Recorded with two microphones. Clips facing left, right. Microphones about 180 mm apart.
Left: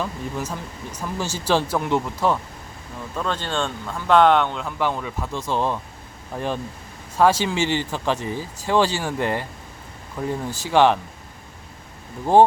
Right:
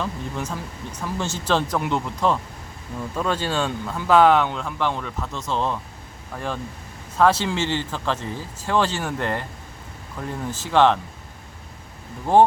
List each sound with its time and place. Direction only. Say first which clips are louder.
0.0 s speech: left 1 dB; 5° left (ahead or behind)
3.2 s speech: right 1 dB; 10° right (ahead or behind); by 11.0 s 10° left (ahead or behind)